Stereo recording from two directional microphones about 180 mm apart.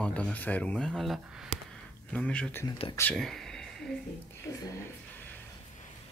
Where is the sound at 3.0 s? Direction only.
5° left (ahead or behind).